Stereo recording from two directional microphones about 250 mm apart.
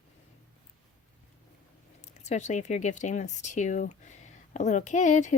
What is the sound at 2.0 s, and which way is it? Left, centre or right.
Speech, left.